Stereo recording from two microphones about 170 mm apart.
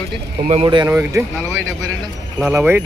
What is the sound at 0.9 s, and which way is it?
Speech, 15° right (ahead or behind).